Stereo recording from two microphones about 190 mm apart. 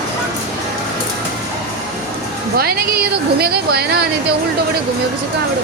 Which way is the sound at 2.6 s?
55° right (ahead or behind).